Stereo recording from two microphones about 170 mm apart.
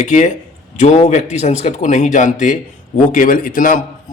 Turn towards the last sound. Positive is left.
turn(degrees=50)  # may be behind; listen again after turning